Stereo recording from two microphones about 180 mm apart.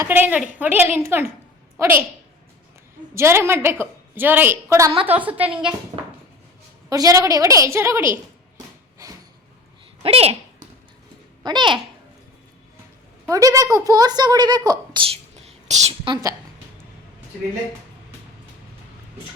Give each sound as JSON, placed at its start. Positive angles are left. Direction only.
{"t": 0.0, "sound": "a woman's voice", "side_deg": -10}
{"t": 3.2, "sound": "a woman's voice", "side_deg": -15}
{"t": 5.5, "sound": "a woman's voice", "side_deg": -30}
{"t": 5.9, "sound": "a sound", "side_deg": -30}
{"t": 6.9, "sound": "a woman's voice", "side_deg": -20}
{"t": 10.0, "sound": "speech", "side_deg": -35}
{"t": 11.4, "sound": "a woman's voice", "side_deg": -25}
{"t": 13.2, "sound": "a woman's voice", "side_deg": -20}